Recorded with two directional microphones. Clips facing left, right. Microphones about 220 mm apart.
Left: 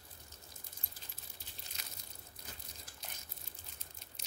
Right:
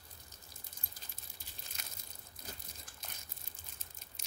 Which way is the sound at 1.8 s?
50° right (ahead or behind).